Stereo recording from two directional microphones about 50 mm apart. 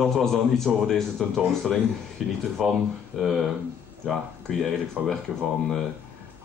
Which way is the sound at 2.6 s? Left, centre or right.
Centre.